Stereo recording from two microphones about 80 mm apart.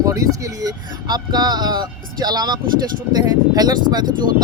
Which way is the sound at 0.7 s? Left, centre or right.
Right.